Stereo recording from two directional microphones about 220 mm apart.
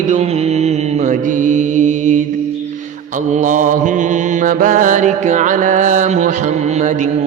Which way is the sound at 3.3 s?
35° right (ahead or behind).